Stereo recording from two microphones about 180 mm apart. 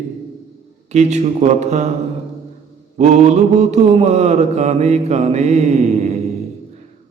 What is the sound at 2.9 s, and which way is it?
Mantra, 40° right (ahead or behind).